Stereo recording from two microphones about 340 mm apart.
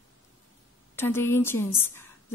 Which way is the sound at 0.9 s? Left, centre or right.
Centre.